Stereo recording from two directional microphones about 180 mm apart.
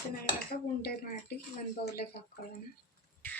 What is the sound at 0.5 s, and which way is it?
Speech, 60° left (ahead or behind).